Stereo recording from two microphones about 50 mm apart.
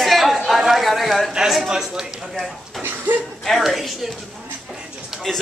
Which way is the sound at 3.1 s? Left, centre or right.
Right.